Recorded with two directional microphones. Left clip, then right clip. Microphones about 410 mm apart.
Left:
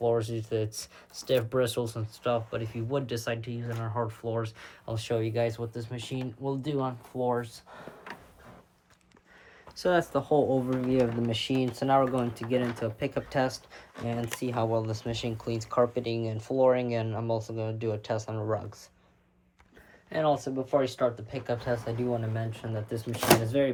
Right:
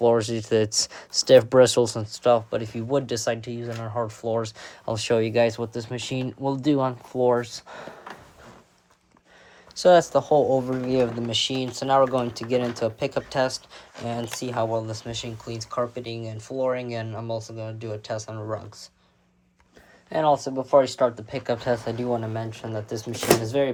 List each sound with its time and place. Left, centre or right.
0.0 s speech: right
9.7 s speech: centre
20.1 s speech: centre